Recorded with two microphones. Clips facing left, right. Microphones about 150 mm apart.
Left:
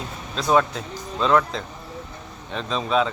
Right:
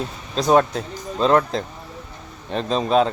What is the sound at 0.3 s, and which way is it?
Speech, 40° right (ahead or behind).